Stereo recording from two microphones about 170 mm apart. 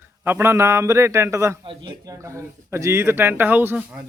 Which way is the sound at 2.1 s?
15° right (ahead or behind).